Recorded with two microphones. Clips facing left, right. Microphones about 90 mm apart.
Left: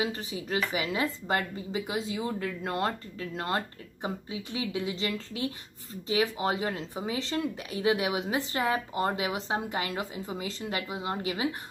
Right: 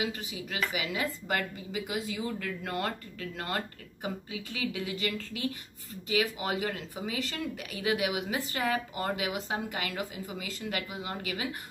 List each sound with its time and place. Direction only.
0.0 s a woman's voice: 35° left (ahead or behind)